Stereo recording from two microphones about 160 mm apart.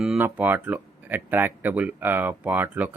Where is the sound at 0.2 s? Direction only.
10° right (ahead or behind).